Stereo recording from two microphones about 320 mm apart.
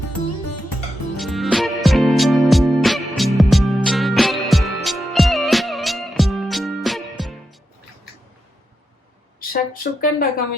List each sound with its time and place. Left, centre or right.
1.1 s music: centre
9.4 s speech: left